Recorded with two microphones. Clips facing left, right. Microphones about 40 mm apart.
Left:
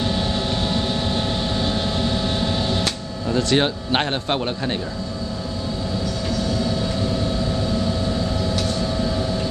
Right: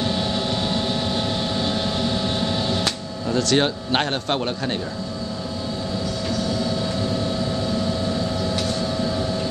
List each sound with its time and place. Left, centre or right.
0.0 s vehicle: centre
3.3 s a man's voice: centre
8.5 s vehicle: centre